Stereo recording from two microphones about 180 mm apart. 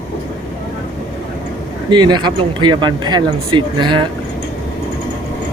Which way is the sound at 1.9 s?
25° right (ahead or behind).